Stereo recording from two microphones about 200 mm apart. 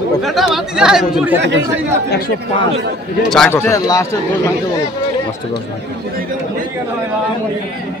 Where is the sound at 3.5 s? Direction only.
15° left (ahead or behind).